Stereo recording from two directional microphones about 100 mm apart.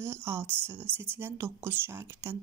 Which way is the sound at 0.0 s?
25° right (ahead or behind).